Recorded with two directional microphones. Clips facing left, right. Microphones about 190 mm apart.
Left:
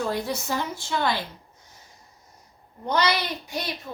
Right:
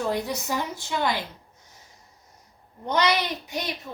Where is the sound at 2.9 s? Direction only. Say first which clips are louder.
Right 1 dB; 20° right (ahead or behind).